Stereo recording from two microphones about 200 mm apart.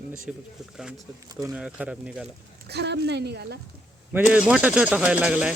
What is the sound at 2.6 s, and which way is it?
Speech, 55° right (ahead or behind).